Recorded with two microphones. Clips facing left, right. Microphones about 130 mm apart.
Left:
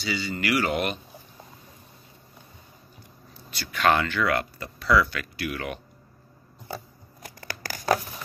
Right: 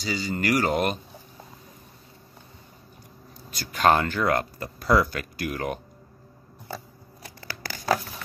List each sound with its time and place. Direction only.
0.0 s speech: 40° right (ahead or behind)
3.4 s speech: 45° right (ahead or behind)
7.3 s tearing: 45° left (ahead or behind)